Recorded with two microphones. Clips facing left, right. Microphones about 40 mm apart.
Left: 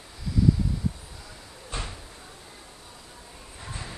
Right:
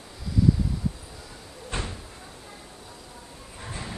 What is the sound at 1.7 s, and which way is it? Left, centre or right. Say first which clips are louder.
Cupboard open or close: right 3 dB; right.